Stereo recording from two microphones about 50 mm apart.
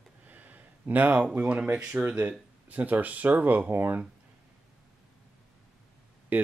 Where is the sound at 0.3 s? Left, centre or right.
Right.